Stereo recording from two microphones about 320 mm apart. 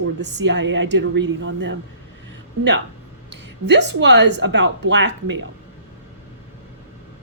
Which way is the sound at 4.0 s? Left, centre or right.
Right.